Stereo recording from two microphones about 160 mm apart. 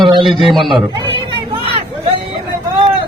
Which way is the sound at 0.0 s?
30° right (ahead or behind).